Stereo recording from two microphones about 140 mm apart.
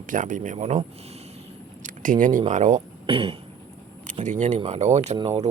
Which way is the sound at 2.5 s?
60° right (ahead or behind).